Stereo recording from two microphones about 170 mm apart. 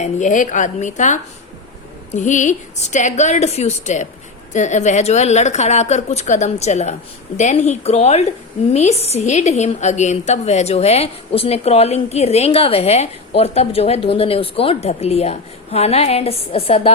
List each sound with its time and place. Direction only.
0.0 s a woman's voice: 45° left (ahead or behind)